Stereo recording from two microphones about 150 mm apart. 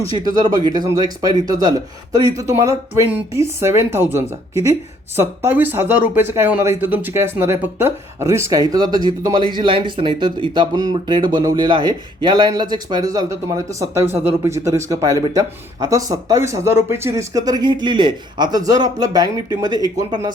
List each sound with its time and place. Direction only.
0.0 s speech: 25° right (ahead or behind)